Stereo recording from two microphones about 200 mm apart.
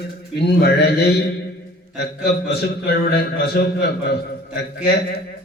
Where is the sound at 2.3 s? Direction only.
55° left (ahead or behind).